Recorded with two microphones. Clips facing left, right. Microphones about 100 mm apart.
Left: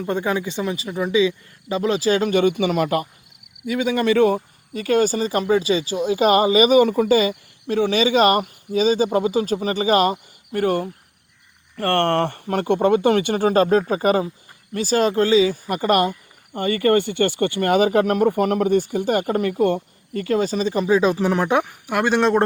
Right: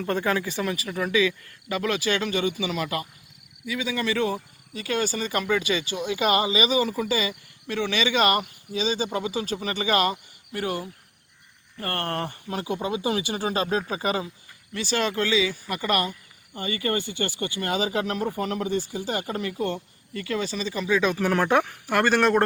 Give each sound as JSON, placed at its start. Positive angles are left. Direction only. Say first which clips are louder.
{"t": 0.0, "sound": "speech", "louder": "left 3 dB", "side_deg": 15}
{"t": 11.8, "sound": "speech", "louder": "left 10 dB", "side_deg": 65}
{"t": 16.5, "sound": "speech", "louder": "left 10 dB", "side_deg": 55}
{"t": 21.2, "sound": "speech", "louder": "left 2 dB", "side_deg": 15}